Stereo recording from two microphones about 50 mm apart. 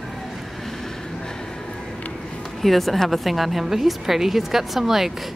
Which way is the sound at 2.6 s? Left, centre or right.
Centre.